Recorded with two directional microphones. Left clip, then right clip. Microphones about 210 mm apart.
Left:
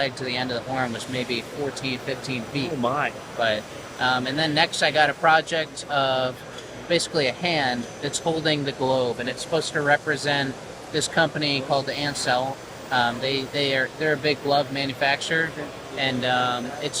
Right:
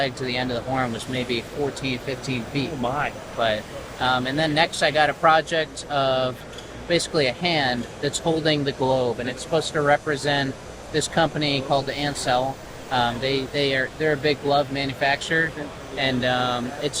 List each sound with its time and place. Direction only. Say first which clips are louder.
0.0 s speech: right 1 dB; 20° right (ahead or behind)
4.0 s speech: right 1 dB; 20° right (ahead or behind)